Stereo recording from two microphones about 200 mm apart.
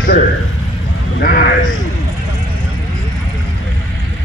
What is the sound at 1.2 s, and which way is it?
Sheep, 45° left (ahead or behind).